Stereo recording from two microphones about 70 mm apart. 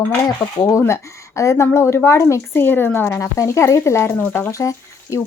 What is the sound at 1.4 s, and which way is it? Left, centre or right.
Speech, left.